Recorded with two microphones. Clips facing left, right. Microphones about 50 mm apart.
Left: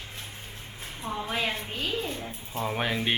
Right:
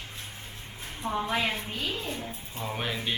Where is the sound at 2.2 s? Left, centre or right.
Centre.